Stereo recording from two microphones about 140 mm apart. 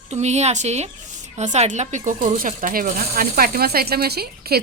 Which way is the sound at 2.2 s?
70° right (ahead or behind).